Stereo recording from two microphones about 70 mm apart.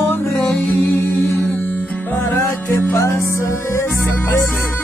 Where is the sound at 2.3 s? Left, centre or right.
Left.